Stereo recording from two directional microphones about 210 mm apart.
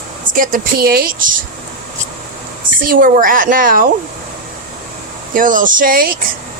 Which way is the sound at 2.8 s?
40° right (ahead or behind).